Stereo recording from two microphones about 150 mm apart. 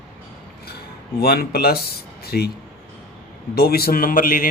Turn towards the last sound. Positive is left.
turn(degrees=70)  # may be behind; listen again after turning